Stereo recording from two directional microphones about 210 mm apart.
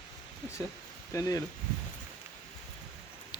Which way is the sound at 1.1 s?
15° left (ahead or behind).